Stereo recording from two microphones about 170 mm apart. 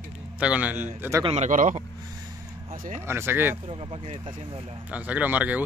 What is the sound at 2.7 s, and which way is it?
Speech, 50° right (ahead or behind).